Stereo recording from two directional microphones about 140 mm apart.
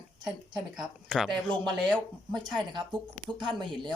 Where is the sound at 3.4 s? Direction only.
35° right (ahead or behind).